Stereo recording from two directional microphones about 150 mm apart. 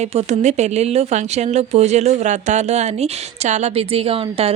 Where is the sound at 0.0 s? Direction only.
50° right (ahead or behind).